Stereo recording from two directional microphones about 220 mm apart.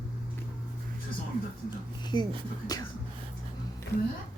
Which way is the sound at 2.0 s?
20° left (ahead or behind).